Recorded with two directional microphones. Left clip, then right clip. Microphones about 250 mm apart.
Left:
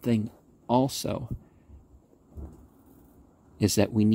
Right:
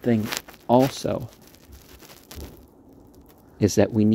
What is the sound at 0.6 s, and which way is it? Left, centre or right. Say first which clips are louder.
Speech: right 6 dB; centre.